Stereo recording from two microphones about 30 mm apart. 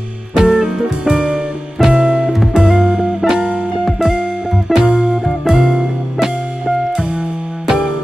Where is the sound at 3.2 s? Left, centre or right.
Centre.